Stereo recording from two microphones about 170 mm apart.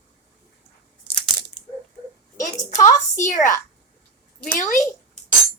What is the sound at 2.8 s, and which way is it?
Speech, 20° left (ahead or behind).